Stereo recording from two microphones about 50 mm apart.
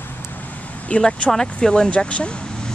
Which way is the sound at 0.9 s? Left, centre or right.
Left.